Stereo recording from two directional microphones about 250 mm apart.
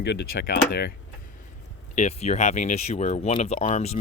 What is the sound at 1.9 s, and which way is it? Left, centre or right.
Speech, left.